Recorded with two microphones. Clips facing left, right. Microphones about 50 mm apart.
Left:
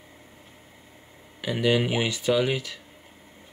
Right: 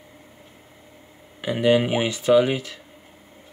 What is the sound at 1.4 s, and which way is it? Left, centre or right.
Speech, right.